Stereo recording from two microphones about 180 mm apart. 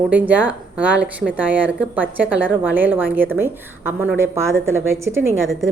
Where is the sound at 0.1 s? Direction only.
10° right (ahead or behind).